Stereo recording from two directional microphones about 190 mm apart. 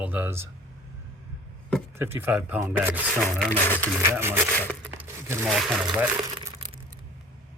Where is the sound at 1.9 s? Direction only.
10° right (ahead or behind).